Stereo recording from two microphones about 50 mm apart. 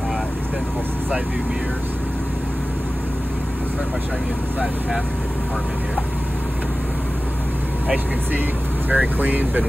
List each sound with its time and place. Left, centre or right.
8.9 s speech: right